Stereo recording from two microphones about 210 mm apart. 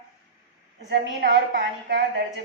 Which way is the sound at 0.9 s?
50° right (ahead or behind).